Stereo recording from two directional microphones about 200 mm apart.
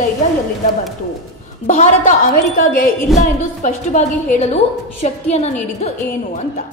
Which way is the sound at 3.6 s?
40° left (ahead or behind).